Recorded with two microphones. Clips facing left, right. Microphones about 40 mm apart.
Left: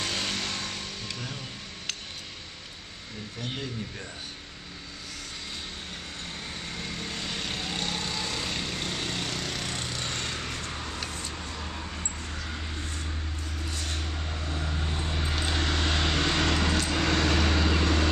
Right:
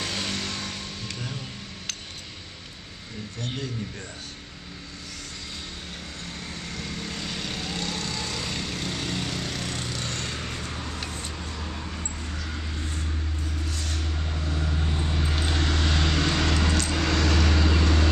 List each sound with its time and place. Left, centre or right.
0.0 s vehicle: centre
6.5 s vehicle: centre
11.1 s vehicle: right
11.3 s a sound: centre
13.7 s a sound: centre
14.0 s vehicle: centre